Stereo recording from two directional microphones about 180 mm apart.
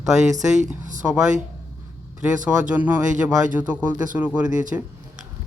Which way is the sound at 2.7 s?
10° right (ahead or behind).